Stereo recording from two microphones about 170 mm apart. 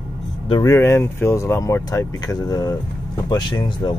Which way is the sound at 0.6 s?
15° left (ahead or behind).